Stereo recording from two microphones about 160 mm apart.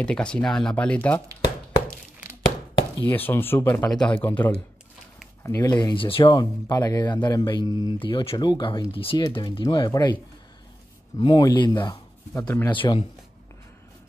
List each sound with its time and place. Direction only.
0.0 s speech: 5° left (ahead or behind)
3.1 s speech: 10° left (ahead or behind)
5.4 s speech: 20° left (ahead or behind)
11.1 s speech: 25° left (ahead or behind)
12.4 s speech: 10° left (ahead or behind)
12.7 s speech: 30° left (ahead or behind)